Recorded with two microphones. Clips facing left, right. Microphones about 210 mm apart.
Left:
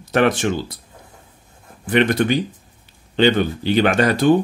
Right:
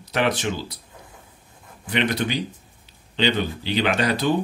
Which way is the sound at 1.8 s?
50° left (ahead or behind).